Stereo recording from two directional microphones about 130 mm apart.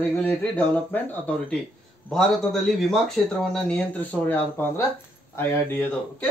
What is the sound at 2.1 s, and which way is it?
Speech, centre (ahead or behind).